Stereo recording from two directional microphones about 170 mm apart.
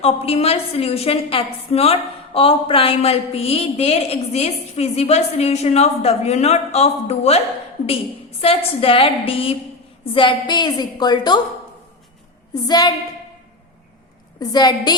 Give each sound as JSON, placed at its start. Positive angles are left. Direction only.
{"t": 0.0, "sound": "a woman's voice", "side_deg": 35}
{"t": 12.6, "sound": "a woman's voice", "side_deg": 25}
{"t": 14.3, "sound": "a woman's voice", "side_deg": 25}